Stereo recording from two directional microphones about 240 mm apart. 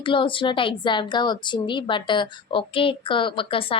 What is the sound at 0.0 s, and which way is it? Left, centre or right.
A woman's voice, left.